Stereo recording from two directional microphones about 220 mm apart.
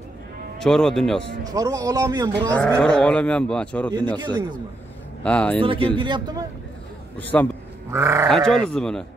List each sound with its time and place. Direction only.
0.6 s speech: centre (ahead or behind)
1.4 s a man's voice: 15° right (ahead or behind)
2.5 s speech: 5° left (ahead or behind)
4.2 s a man's voice: 20° right (ahead or behind)
5.2 s speech: 5° left (ahead or behind)
5.6 s a man's voice: 25° right (ahead or behind)
7.2 s a man's voice: 10° left (ahead or behind)
7.9 s a man's voice: 15° right (ahead or behind)
8.3 s speech: centre (ahead or behind)